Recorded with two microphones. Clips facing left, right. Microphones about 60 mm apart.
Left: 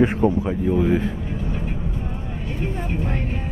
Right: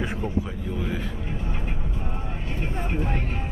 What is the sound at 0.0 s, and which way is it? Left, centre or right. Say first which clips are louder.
Speech: left 10 dB; left.